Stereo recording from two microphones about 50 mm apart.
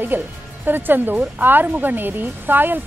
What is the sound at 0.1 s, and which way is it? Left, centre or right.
Speech, right.